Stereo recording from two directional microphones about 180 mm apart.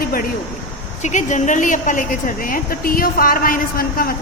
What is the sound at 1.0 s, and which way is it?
A woman's voice, 45° left (ahead or behind).